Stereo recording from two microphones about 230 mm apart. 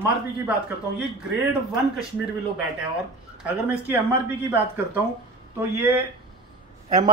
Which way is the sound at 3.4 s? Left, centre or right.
Centre.